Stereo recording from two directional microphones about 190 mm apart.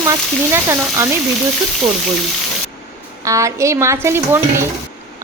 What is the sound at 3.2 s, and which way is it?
A woman's voice, 15° right (ahead or behind).